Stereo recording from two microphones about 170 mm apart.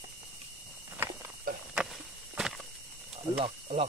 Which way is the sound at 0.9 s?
10° right (ahead or behind).